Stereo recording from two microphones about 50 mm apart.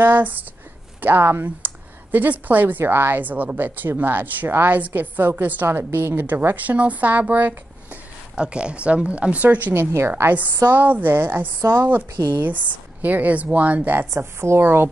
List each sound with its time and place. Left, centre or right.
0.0 s speech: right
2.8 s speech: right
5.7 s a woman's voice: right
6.5 s speech: right
8.4 s speech: right
9.8 s a woman's voice: right
10.7 s speech: right
14.1 s a woman's voice: right
14.6 s a woman's voice: right